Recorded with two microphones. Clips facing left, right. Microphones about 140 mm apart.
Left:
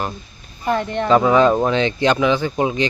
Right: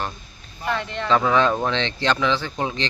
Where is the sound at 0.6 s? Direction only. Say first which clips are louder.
Left 6 dB; 45° left (ahead or behind).